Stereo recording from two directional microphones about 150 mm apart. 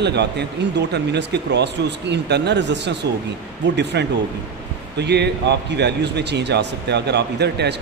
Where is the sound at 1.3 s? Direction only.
90° right.